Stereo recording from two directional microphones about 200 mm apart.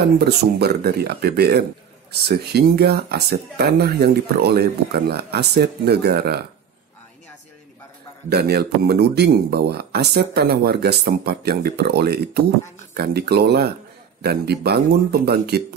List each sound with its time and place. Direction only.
0.2 s speech: 55° right (ahead or behind)
8.3 s speech: 55° right (ahead or behind)